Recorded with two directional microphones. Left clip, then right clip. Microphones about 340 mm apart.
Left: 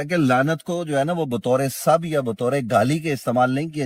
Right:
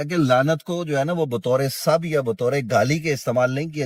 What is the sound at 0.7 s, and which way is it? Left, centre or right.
Speech, left.